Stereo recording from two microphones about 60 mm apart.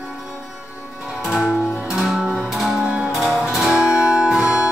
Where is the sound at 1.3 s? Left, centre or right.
Centre.